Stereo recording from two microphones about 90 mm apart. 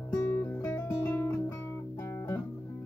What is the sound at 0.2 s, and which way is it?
Music, 35° left (ahead or behind).